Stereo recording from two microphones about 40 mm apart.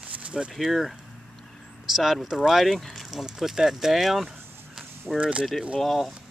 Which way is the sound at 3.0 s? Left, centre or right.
Centre.